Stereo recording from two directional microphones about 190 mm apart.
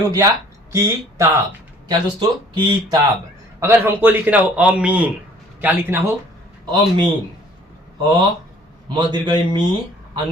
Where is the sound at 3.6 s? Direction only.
15° right (ahead or behind).